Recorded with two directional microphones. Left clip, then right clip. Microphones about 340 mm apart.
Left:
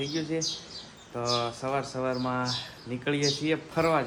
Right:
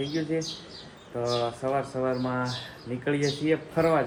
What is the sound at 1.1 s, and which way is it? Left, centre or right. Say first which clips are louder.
Speech: right 1 dB; centre.